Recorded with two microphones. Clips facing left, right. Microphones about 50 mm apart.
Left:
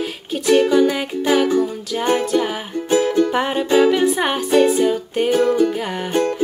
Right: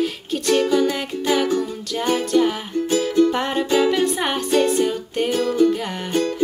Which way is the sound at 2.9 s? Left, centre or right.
Left.